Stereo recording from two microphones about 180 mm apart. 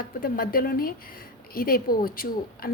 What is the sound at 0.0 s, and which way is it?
A woman's voice, 55° left (ahead or behind).